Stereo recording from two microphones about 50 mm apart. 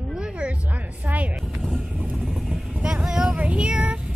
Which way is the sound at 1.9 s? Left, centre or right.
Centre.